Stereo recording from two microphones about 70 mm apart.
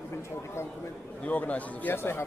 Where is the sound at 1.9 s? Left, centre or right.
Left.